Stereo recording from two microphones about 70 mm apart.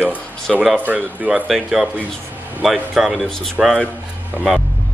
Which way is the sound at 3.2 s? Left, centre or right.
Centre.